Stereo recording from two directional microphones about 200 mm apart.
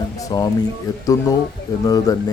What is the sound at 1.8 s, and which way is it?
Speech, 20° left (ahead or behind).